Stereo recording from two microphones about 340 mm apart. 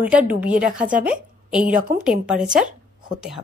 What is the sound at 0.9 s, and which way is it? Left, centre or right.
Speech, right.